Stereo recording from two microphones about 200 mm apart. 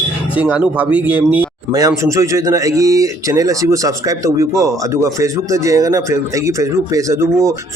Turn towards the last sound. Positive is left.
turn(degrees=-15)  # may be behind; listen again after turning